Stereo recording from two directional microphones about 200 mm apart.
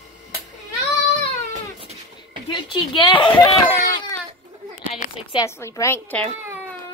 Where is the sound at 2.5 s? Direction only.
25° left (ahead or behind).